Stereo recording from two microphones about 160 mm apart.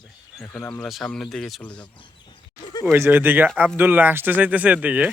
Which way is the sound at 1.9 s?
30° left (ahead or behind).